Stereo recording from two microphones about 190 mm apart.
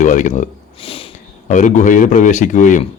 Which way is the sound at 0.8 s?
30° left (ahead or behind).